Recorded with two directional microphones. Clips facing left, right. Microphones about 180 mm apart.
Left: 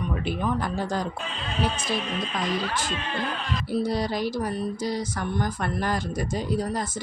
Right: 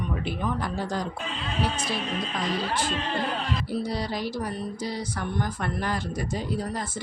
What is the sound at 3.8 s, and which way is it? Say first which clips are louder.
Speech: left 4 dB; 45° left (ahead or behind).